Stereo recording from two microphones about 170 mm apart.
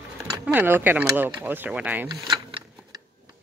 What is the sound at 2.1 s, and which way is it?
Speech, 25° right (ahead or behind).